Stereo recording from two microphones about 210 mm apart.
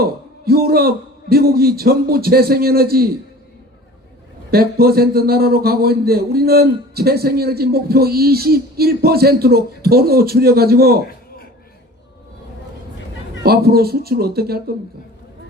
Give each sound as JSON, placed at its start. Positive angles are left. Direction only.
{"t": 0.0, "sound": "a man's voice", "side_deg": -50}
{"t": 4.5, "sound": "a man's voice", "side_deg": -45}
{"t": 13.4, "sound": "a man's voice", "side_deg": -50}